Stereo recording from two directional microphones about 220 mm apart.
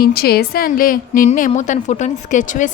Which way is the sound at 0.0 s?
45° left (ahead or behind).